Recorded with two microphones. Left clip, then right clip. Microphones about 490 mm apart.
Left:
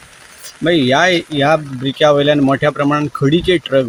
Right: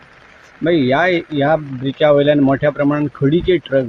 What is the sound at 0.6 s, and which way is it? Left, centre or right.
Speech, right.